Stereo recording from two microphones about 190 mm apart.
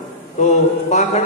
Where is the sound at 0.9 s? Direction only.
35° left (ahead or behind).